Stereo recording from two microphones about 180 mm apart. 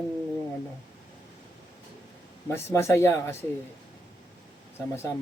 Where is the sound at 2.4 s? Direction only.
15° left (ahead or behind).